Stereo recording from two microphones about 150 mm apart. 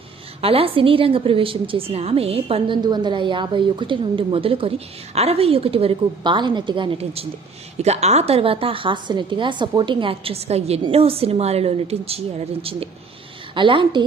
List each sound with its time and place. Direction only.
0.4 s a woman's voice: 40° right (ahead or behind)